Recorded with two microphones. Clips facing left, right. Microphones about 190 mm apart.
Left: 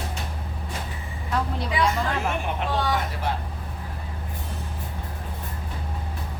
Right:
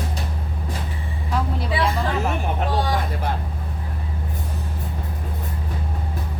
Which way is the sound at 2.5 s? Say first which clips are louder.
Right 2 dB; 40° right (ahead or behind).